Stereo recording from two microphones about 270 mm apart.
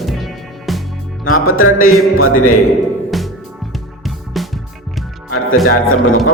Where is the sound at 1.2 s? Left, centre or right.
Left.